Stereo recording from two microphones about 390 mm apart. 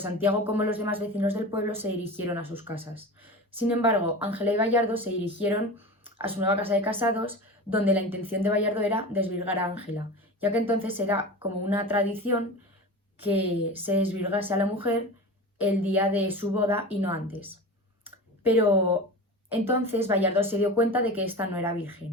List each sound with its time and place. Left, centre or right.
0.0 s speech: centre
18.0 s a sound: centre
19.5 s speech: centre